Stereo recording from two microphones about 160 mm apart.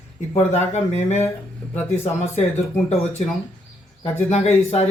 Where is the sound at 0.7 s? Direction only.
45° left (ahead or behind).